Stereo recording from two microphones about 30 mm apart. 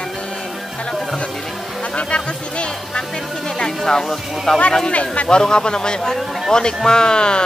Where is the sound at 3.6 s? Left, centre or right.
Left.